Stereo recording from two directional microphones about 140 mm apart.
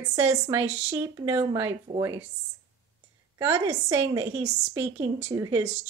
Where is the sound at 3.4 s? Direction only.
20° right (ahead or behind).